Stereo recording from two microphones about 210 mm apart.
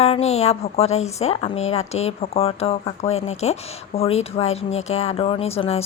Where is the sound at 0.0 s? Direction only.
30° left (ahead or behind).